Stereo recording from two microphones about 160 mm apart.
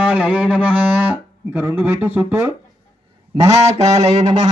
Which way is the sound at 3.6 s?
45° right (ahead or behind).